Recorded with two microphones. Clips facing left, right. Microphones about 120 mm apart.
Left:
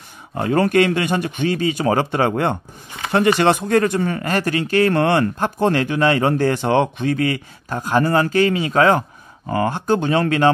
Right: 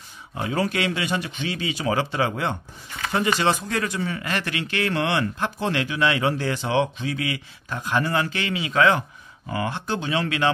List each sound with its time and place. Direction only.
0.3 s speech: 55° left (ahead or behind)